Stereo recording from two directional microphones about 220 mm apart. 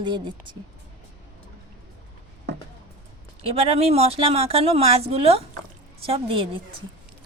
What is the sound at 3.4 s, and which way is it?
Speech, 25° right (ahead or behind).